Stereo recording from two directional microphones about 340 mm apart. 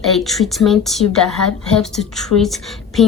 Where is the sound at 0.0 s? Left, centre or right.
Centre.